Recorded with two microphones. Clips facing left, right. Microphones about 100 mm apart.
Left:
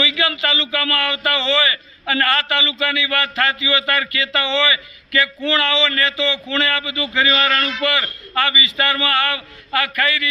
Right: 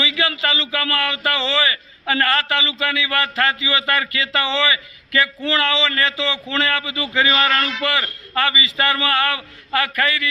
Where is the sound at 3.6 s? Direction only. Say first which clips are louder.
Left 1 dB; 30° right (ahead or behind).